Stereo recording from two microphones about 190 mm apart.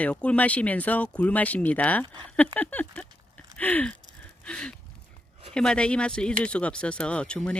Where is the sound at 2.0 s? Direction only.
25° right (ahead or behind).